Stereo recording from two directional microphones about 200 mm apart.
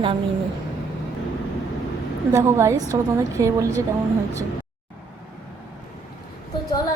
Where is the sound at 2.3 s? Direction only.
15° right (ahead or behind).